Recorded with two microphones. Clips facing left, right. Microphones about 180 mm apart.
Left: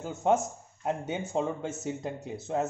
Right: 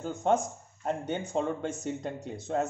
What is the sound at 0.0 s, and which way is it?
A man's voice, 5° left (ahead or behind).